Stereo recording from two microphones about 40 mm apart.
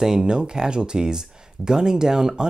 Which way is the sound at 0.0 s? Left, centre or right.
Centre.